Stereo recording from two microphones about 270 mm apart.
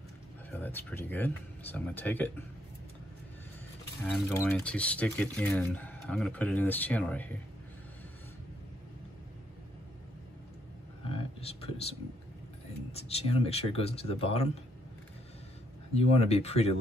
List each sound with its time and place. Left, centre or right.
0.5 s speech: centre
4.0 s speech: centre
11.4 s speech: left
12.9 s speech: left
15.9 s speech: left